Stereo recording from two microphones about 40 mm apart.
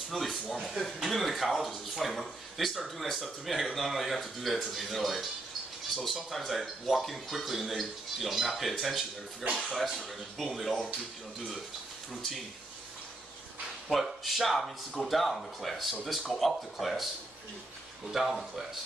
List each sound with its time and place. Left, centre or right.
0.5 s speech: centre
9.5 s speech: right
9.8 s speech: centre
13.8 s speech: centre
18.1 s speech: centre